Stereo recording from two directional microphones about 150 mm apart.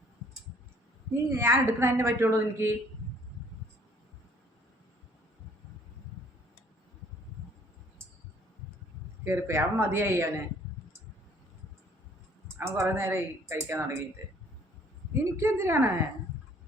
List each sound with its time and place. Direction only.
1.3 s a woman's voice: 15° right (ahead or behind)
9.2 s a woman's voice: 15° right (ahead or behind)
12.5 s a woman's voice: 15° right (ahead or behind)
15.2 s a woman's voice: 15° right (ahead or behind)